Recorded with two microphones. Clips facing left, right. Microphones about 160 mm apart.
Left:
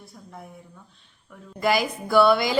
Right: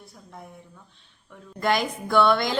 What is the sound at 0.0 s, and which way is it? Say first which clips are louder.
A woman's voice: left 1 dB; centre (ahead or behind).